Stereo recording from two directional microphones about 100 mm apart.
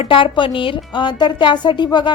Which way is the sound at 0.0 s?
60° left (ahead or behind).